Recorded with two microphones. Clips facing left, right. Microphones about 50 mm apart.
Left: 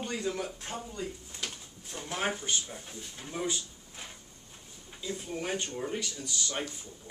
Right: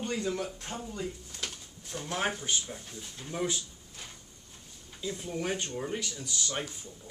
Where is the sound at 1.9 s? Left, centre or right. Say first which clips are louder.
Right 1 dB; centre.